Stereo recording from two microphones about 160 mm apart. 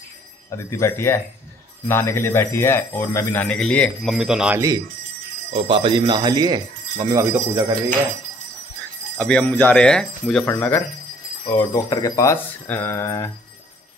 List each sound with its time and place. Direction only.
0.5 s speech: 15° left (ahead or behind)
3.4 s speech: 5° left (ahead or behind)
5.5 s speech: 35° right (ahead or behind)
9.2 s speech: 10° left (ahead or behind)